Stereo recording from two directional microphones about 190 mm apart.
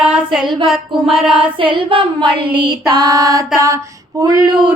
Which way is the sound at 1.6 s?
25° right (ahead or behind).